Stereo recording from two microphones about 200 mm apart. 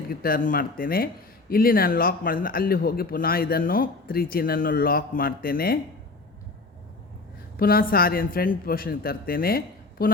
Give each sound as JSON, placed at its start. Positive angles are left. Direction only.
{"t": 0.1, "sound": "speech", "side_deg": 50}
{"t": 7.5, "sound": "speech", "side_deg": 45}